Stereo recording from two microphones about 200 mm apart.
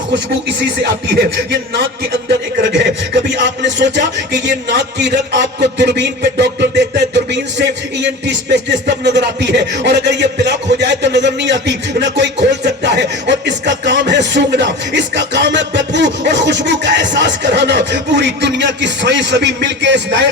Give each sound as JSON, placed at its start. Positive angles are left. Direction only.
{"t": 3.2, "sound": "a man's voice", "side_deg": -60}